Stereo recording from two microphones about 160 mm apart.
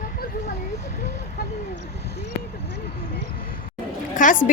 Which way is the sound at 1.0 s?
80° left.